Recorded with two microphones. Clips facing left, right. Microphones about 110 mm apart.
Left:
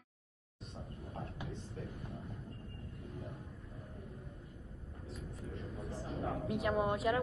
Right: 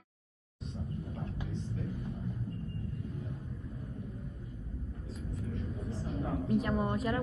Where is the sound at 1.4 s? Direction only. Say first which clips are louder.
Right 5 dB; 65° left (ahead or behind).